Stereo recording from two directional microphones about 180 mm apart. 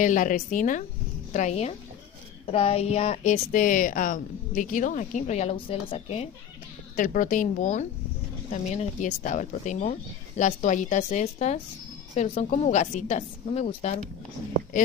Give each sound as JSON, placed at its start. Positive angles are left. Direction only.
{"t": 0.0, "sound": "a woman's voice", "side_deg": 45}
{"t": 7.0, "sound": "a woman's voice", "side_deg": 45}